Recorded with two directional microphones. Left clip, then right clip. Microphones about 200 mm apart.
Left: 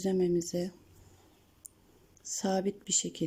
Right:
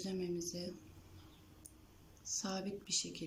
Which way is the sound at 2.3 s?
35° left (ahead or behind).